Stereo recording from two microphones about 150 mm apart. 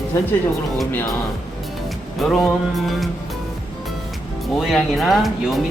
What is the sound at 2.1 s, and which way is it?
Speech, centre (ahead or behind).